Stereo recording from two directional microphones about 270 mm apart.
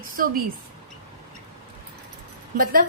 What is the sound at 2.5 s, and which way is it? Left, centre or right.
Speech, right.